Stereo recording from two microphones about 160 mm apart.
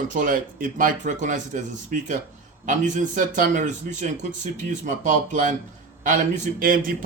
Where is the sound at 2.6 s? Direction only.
50° right (ahead or behind).